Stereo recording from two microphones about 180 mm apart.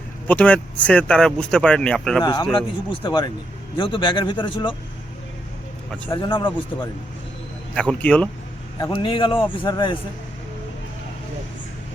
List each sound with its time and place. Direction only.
0.3 s speech: 10° left (ahead or behind)
2.2 s a man's voice: 25° left (ahead or behind)
6.1 s a man's voice: 25° left (ahead or behind)
7.8 s speech: 5° left (ahead or behind)
8.9 s a man's voice: 30° left (ahead or behind)